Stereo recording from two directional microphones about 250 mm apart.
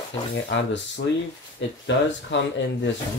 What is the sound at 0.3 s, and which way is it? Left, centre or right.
Speech, left.